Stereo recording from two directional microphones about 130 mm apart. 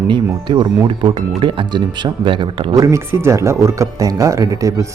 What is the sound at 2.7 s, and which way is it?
Speech, 25° right (ahead or behind).